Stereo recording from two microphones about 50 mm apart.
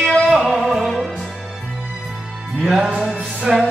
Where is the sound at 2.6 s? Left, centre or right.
Centre.